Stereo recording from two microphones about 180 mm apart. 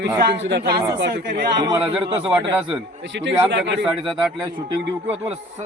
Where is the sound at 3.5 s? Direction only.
75° right (ahead or behind).